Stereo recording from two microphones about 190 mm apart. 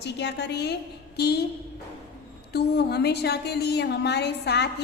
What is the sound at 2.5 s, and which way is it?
A woman's voice, 60° left (ahead or behind).